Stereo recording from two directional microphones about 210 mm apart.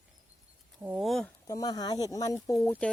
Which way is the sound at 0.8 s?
5° right (ahead or behind).